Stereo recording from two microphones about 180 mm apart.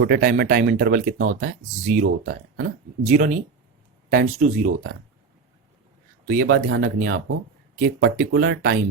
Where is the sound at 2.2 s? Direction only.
70° right (ahead or behind).